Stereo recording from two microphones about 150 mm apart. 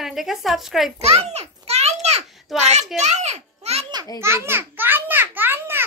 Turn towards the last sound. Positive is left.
turn(degrees=-15)  # may be behind; listen again after turning